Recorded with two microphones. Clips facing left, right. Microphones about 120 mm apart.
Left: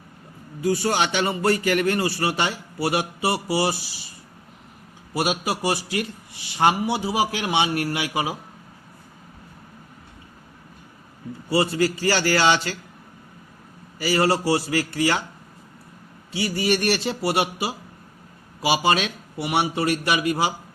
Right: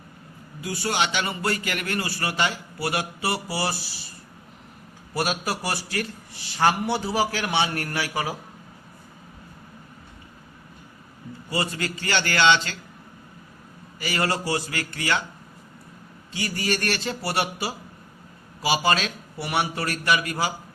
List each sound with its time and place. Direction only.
0.6 s a man's voice: 30° left (ahead or behind)
5.1 s a man's voice: 15° left (ahead or behind)
11.4 s a man's voice: 30° left (ahead or behind)
14.0 s a man's voice: 30° left (ahead or behind)
16.4 s a man's voice: 25° left (ahead or behind)